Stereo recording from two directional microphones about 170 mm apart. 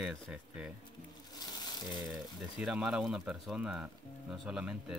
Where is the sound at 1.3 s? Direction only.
25° left (ahead or behind).